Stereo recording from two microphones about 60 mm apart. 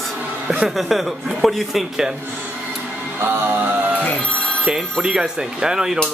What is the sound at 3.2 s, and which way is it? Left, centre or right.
Music, right.